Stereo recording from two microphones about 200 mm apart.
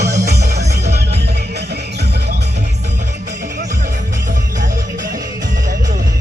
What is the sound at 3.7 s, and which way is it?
Music, 40° right (ahead or behind).